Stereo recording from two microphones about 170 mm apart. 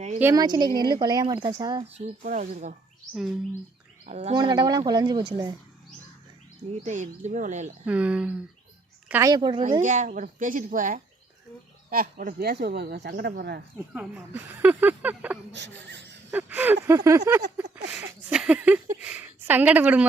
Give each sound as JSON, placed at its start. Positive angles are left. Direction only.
{"t": 0.2, "sound": "a woman's voice", "side_deg": -20}
{"t": 2.2, "sound": "a woman's voice", "side_deg": -45}
{"t": 4.0, "sound": "speech", "side_deg": -40}
{"t": 4.4, "sound": "a woman's voice", "side_deg": -25}
{"t": 6.8, "sound": "a woman's voice", "side_deg": -45}
{"t": 7.9, "sound": "a woman's voice", "side_deg": -5}
{"t": 9.3, "sound": "a woman's voice", "side_deg": -25}
{"t": 9.8, "sound": "a woman's voice", "side_deg": -45}
{"t": 13.9, "sound": "speech", "side_deg": -10}
{"t": 15.8, "sound": "a sound", "side_deg": -90}
{"t": 16.3, "sound": "a woman's voice", "side_deg": -10}